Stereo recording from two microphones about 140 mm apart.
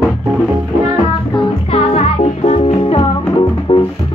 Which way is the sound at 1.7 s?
50° left (ahead or behind).